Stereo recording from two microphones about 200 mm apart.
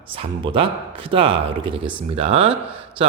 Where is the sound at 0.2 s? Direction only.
25° right (ahead or behind).